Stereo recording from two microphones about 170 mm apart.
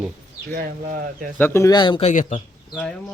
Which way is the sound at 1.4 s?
15° left (ahead or behind).